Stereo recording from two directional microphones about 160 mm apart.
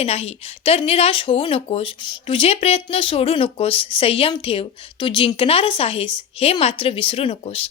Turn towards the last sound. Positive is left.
turn(degrees=35)  # may be behind; listen again after turning